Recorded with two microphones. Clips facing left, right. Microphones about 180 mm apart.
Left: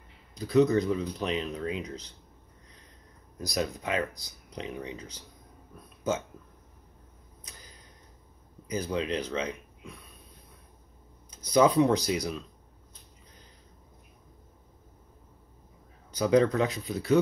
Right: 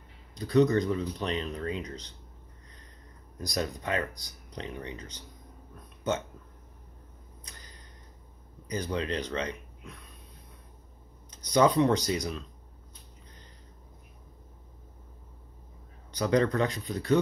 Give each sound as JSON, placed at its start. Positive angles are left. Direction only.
{"t": 0.3, "sound": "speech", "side_deg": 5}
{"t": 3.3, "sound": "speech", "side_deg": 5}
{"t": 7.4, "sound": "a sound", "side_deg": 5}
{"t": 8.6, "sound": "speech", "side_deg": 5}
{"t": 11.2, "sound": "speech", "side_deg": 5}
{"t": 16.1, "sound": "speech", "side_deg": 5}